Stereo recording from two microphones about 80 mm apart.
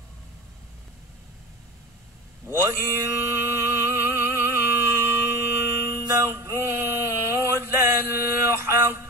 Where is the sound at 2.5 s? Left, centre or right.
Right.